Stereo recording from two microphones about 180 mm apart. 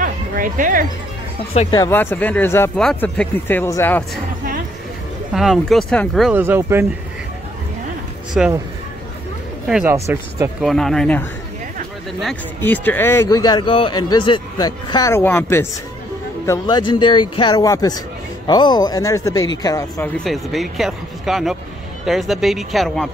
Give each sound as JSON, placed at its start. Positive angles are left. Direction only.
{"t": 0.0, "sound": "music", "side_deg": -50}
{"t": 1.7, "sound": "speech", "side_deg": 15}
{"t": 5.3, "sound": "speech", "side_deg": 0}
{"t": 6.3, "sound": "speech", "side_deg": -10}
{"t": 8.3, "sound": "speech", "side_deg": -5}
{"t": 9.8, "sound": "speech", "side_deg": -15}
{"t": 10.6, "sound": "speech", "side_deg": 0}
{"t": 16.4, "sound": "speech", "side_deg": 25}
{"t": 20.2, "sound": "speech", "side_deg": 0}